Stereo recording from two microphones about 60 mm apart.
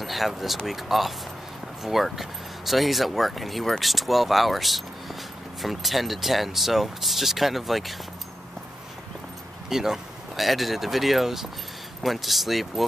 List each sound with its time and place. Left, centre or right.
0.0 s speech: centre
9.7 s speech: centre